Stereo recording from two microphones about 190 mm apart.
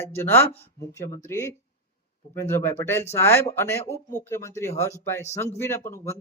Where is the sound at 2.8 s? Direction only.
10° left (ahead or behind).